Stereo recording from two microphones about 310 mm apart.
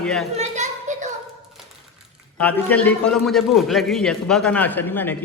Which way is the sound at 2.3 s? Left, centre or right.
Centre.